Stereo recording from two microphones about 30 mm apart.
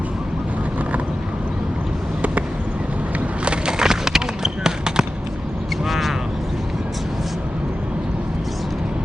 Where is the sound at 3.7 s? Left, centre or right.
Centre.